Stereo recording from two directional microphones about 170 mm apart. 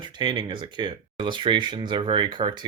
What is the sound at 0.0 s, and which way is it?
Speech, 25° right (ahead or behind).